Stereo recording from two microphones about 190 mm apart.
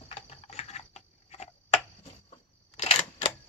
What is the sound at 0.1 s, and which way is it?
Typing, 30° left (ahead or behind).